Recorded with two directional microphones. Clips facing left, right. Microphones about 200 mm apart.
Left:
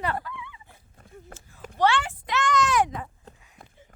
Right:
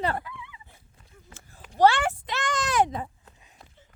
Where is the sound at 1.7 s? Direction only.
35° right (ahead or behind).